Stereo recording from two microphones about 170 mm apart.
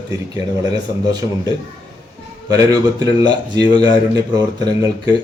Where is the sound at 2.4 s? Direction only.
20° right (ahead or behind).